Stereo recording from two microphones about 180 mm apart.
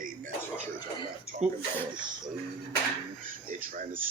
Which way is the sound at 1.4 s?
30° right (ahead or behind).